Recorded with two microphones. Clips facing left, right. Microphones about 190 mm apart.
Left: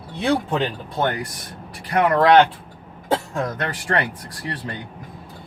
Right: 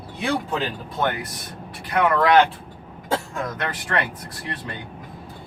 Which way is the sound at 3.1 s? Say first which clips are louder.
Left 3 dB; 30° left (ahead or behind).